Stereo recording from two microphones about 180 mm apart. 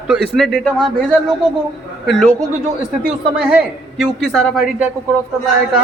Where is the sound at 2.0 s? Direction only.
Centre (ahead or behind).